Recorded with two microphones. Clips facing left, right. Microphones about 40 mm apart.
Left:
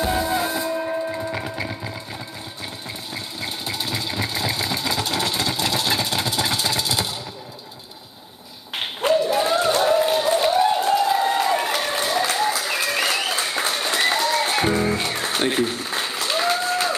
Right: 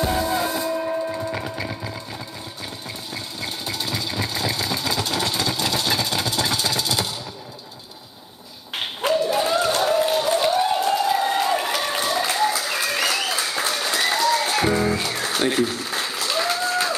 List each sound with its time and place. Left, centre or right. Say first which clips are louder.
0.2 s music: even; centre
3.3 s engine: left 1 dB; left
9.0 s a sound: left 2 dB; centre
12.0 s applause: right 1 dB; centre
13.0 s music: even; left
14.8 s applause: even; left